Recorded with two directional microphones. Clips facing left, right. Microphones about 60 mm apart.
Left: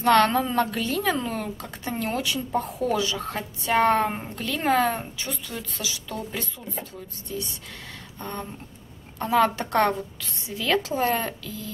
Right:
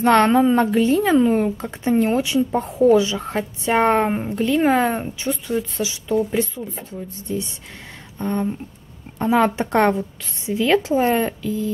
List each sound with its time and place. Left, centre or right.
0.0 s a woman's voice: right